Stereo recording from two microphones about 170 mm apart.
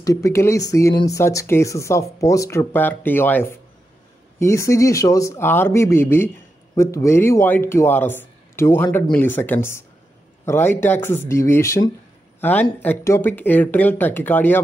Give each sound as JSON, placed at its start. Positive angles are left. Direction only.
{"t": 0.0, "sound": "speech", "side_deg": 20}